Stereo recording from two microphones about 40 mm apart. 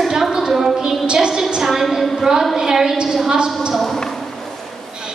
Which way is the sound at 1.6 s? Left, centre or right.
Centre.